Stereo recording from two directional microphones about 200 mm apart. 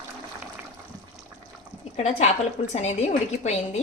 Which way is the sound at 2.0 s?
35° left (ahead or behind).